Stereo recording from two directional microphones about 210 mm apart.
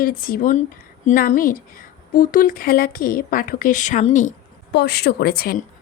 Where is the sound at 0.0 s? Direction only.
40° left (ahead or behind).